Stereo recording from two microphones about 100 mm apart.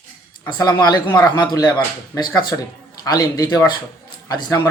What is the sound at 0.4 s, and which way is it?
A man's voice, 45° left (ahead or behind).